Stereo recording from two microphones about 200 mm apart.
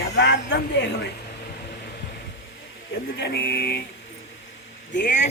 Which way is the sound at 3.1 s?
55° left (ahead or behind).